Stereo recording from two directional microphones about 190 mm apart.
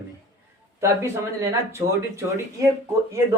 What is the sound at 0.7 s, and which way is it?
Speech, 15° right (ahead or behind).